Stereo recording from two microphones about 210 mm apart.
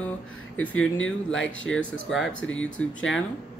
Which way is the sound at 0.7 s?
65° left (ahead or behind).